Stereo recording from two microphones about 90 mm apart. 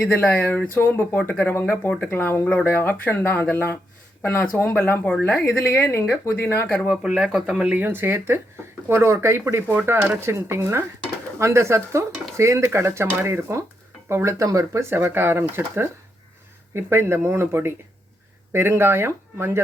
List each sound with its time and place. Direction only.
0.0 s speech: 20° left (ahead or behind)
6.8 s speech: 10° right (ahead or behind)
7.9 s speech: 25° right (ahead or behind)